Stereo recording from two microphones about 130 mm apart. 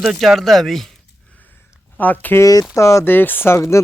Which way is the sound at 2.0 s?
15° left (ahead or behind).